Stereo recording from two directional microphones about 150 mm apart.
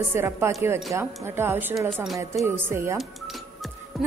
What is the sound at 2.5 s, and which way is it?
Speech, 15° right (ahead or behind).